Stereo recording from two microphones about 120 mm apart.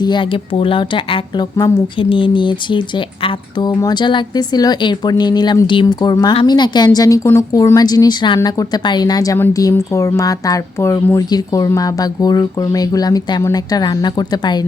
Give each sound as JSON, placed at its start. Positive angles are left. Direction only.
{"t": 0.0, "sound": "speech", "side_deg": 40}